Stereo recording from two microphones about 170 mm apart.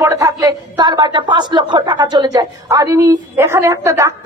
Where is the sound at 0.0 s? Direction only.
20° right (ahead or behind).